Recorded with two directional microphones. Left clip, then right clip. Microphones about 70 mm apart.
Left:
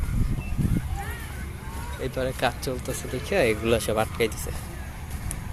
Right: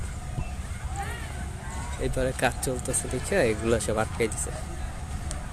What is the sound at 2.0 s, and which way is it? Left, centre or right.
Speech, right.